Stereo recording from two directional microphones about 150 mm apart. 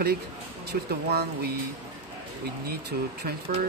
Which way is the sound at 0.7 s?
75° right (ahead or behind).